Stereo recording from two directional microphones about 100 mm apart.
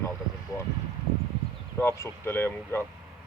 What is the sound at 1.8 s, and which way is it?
Speech, 25° left (ahead or behind).